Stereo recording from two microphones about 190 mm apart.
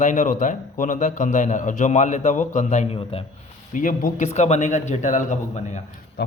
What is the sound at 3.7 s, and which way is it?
A man's voice, 45° left (ahead or behind).